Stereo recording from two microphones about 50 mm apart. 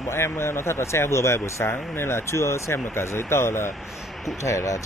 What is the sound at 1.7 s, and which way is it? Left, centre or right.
Speech, left.